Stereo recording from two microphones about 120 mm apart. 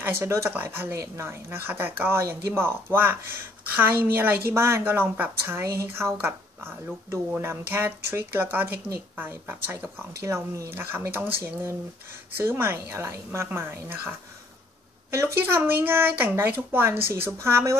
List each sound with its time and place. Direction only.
0.0 s a woman's voice: 20° right (ahead or behind)